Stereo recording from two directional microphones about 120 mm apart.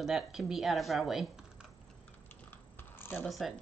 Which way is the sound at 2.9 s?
15° left (ahead or behind).